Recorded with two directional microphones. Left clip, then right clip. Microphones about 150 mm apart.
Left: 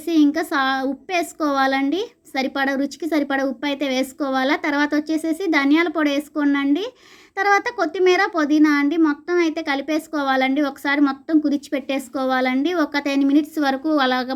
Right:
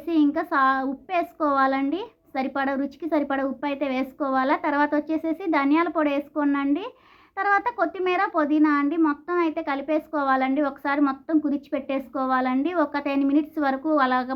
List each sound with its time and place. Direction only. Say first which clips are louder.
0.0 s a child's voice: left 4 dB; 20° left (ahead or behind)